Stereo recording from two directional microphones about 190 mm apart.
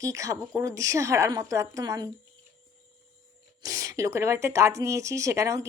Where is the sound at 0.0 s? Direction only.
15° right (ahead or behind).